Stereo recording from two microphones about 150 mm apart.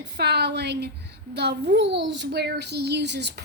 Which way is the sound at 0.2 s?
90° right.